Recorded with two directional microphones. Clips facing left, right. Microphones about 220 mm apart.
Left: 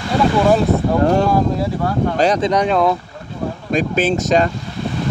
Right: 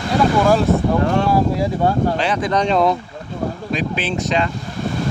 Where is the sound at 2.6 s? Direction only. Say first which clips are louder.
Right 3 dB; centre (ahead or behind).